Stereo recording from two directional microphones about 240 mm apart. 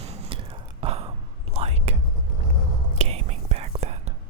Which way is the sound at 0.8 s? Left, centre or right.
Right.